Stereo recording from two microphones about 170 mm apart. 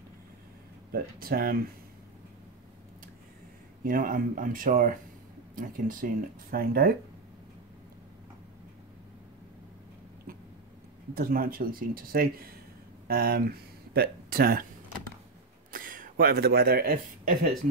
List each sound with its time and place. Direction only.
0.9 s speech: 60° right (ahead or behind)
3.8 s speech: 55° right (ahead or behind)
11.1 s speech: 60° right (ahead or behind)
15.7 s speech: 55° right (ahead or behind)